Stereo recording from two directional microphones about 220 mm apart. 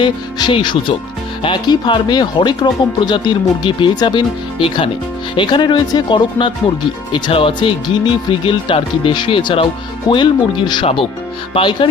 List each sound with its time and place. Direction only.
0.0 s speech: 20° left (ahead or behind)